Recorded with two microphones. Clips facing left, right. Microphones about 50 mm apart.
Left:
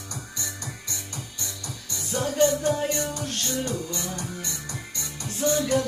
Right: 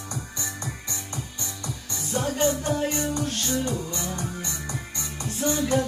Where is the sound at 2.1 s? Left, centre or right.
Right.